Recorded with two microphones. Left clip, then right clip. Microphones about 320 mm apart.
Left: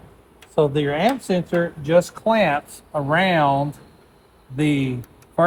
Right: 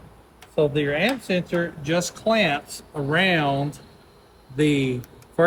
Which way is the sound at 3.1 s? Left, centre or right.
Centre.